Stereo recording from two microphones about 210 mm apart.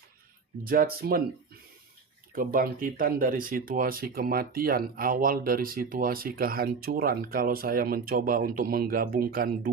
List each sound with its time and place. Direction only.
0.6 s speech: 45° right (ahead or behind)
2.3 s speech: 40° right (ahead or behind)